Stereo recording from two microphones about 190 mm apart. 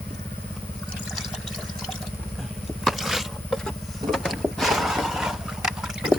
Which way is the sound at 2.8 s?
Centre (ahead or behind).